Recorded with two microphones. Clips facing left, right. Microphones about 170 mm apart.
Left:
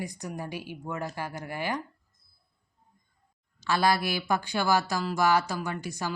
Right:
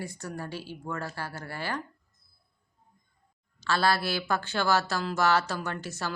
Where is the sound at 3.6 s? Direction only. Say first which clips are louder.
Left 1 dB; 15° left (ahead or behind).